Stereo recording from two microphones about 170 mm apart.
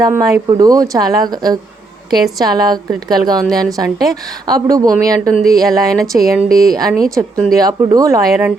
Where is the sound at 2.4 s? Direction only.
25° right (ahead or behind).